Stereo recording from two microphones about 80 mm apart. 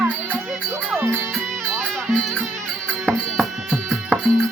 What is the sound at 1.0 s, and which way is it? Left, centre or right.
Music, right.